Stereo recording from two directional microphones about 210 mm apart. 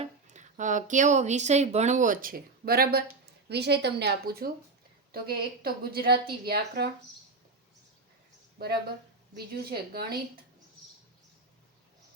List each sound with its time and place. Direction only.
0.0 s a woman's voice: 35° right (ahead or behind)
8.5 s a woman's voice: 50° right (ahead or behind)